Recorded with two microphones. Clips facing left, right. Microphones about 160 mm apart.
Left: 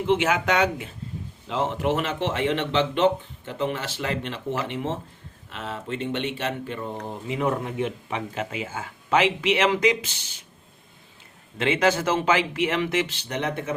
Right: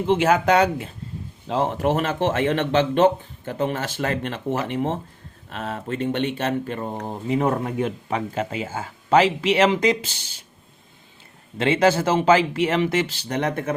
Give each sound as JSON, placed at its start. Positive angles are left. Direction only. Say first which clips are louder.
{"t": 0.1, "sound": "speech", "louder": "right 4 dB", "side_deg": -40}
{"t": 11.5, "sound": "speech", "louder": "right 3 dB", "side_deg": -30}